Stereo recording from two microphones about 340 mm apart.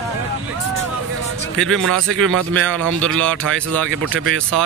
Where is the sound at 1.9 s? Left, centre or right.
Right.